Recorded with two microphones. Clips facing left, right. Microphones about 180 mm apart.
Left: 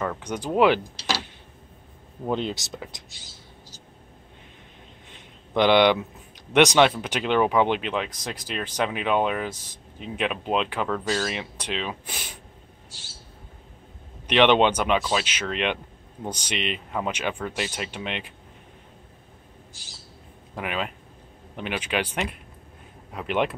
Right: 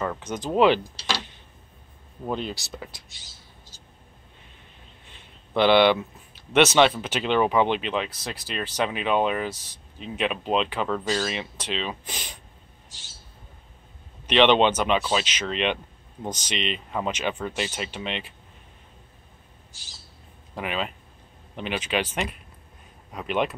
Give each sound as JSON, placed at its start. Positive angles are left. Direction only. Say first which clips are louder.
{"t": 0.2, "sound": "speech", "louder": "even", "side_deg": 10}
{"t": 2.3, "sound": "speech", "louder": "left 3 dB", "side_deg": 20}
{"t": 5.6, "sound": "speech", "louder": "even", "side_deg": 15}
{"t": 14.2, "sound": "speech", "louder": "even", "side_deg": 10}
{"t": 20.5, "sound": "speech", "louder": "even", "side_deg": 10}